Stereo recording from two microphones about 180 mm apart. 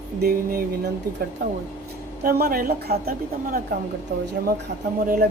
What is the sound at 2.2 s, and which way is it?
Speech, 55° right (ahead or behind).